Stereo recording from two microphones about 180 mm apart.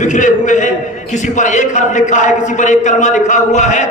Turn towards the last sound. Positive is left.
turn(degrees=40)  # may be behind; listen again after turning